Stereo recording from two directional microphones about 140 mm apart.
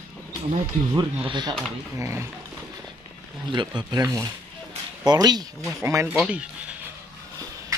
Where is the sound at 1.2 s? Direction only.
35° right (ahead or behind).